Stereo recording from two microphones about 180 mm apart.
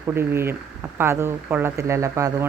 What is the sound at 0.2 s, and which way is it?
Speech, 15° right (ahead or behind).